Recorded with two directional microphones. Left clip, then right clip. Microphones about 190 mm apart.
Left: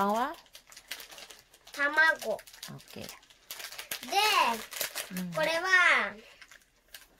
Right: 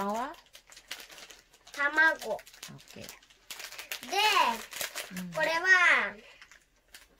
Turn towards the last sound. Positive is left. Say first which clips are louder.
# right 1 dB
turn(degrees=0)  # may be behind; listen again after turning